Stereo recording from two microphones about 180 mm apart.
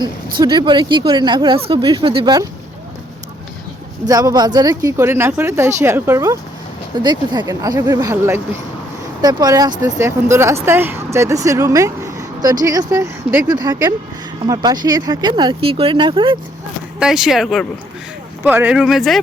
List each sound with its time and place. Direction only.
0.3 s speech: 25° right (ahead or behind)
4.0 s speech: 20° right (ahead or behind)
17.0 s speech: centre (ahead or behind)